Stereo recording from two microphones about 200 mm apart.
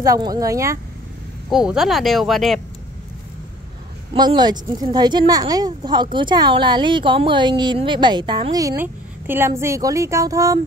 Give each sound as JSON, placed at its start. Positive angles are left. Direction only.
{"t": 0.0, "sound": "speech", "side_deg": -20}
{"t": 1.5, "sound": "speech", "side_deg": 0}
{"t": 4.1, "sound": "a woman's voice", "side_deg": -25}